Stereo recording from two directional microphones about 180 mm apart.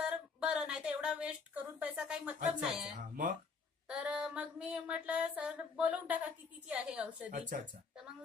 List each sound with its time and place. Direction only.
0.0 s speech: 5° right (ahead or behind)
3.8 s a sound: 5° right (ahead or behind)
7.3 s speech: 45° right (ahead or behind)